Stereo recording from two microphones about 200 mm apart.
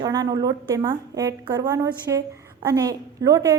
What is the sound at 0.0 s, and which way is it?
A woman's voice, 20° right (ahead or behind).